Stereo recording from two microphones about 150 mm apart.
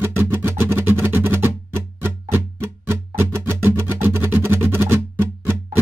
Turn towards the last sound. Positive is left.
turn(degrees=-15)  # may be behind; listen again after turning